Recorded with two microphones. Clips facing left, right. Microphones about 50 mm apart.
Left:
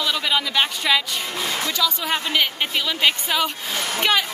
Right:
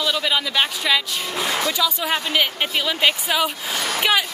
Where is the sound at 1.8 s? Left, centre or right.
Centre.